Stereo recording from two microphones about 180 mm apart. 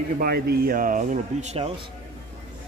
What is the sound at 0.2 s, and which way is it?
Speech, 60° right (ahead or behind).